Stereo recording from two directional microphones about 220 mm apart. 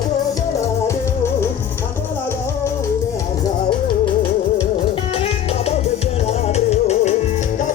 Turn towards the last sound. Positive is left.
turn(degrees=30)  # may be behind; listen again after turning